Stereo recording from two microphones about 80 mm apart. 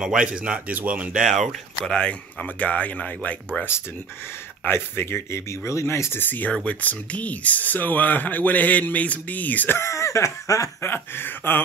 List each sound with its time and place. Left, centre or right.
0.0 s speech: centre
1.3 s speech: centre
1.9 s speech: centre
4.6 s speech: left
9.8 s speech: left
10.8 s speech: left